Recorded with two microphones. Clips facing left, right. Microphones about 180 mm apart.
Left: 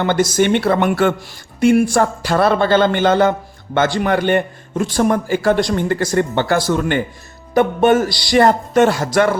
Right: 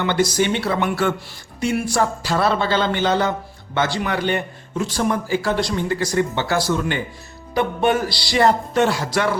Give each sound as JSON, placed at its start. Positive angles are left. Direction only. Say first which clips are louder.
{"t": 0.0, "sound": "a man's voice", "louder": "left 4 dB", "side_deg": 45}